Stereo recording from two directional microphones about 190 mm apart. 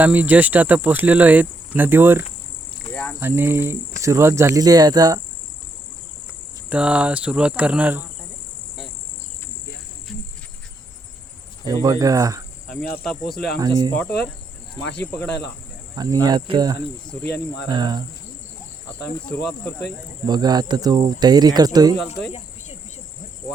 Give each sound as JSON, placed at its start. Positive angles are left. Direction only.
{"t": 0.0, "sound": "speech", "side_deg": -10}
{"t": 2.9, "sound": "cricket", "side_deg": 5}
{"t": 3.2, "sound": "speech", "side_deg": -10}
{"t": 6.7, "sound": "speech", "side_deg": -5}
{"t": 11.7, "sound": "speech", "side_deg": -20}
{"t": 12.7, "sound": "speech", "side_deg": 0}
{"t": 13.6, "sound": "speech", "side_deg": -20}
{"t": 14.9, "sound": "speech", "side_deg": 10}
{"t": 16.0, "sound": "speech", "side_deg": -20}
{"t": 20.2, "sound": "speech", "side_deg": -20}